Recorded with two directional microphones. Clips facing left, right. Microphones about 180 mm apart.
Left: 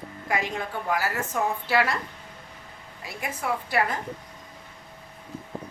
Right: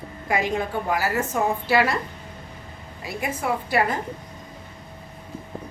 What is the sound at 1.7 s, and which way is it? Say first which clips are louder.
Speech: right 4 dB; 5° right (ahead or behind).